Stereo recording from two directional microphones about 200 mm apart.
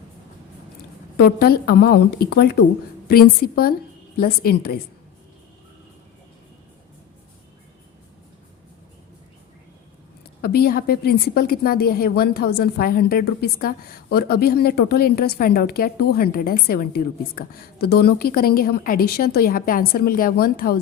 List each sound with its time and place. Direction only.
1.1 s a woman's voice: 50° left (ahead or behind)
10.4 s a woman's voice: 50° left (ahead or behind)